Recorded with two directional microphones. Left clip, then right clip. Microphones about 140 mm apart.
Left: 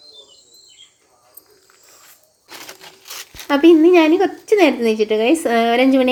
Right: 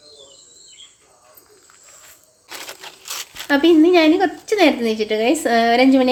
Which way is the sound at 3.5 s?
5° left (ahead or behind).